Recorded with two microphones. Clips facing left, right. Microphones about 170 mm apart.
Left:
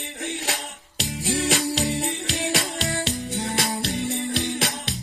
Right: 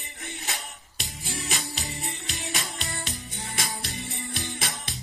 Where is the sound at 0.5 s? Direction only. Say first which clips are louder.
Left 6 dB; 75° left (ahead or behind).